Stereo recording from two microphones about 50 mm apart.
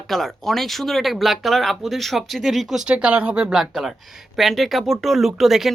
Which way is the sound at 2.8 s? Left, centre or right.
Right.